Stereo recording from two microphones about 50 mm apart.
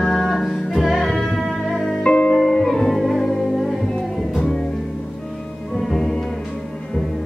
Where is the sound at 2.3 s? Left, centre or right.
Centre.